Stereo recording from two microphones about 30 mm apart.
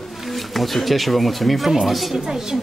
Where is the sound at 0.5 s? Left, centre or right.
Centre.